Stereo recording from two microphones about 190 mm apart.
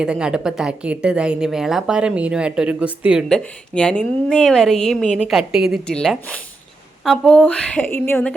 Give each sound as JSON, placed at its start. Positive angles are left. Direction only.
{"t": 0.0, "sound": "a woman's voice", "side_deg": -5}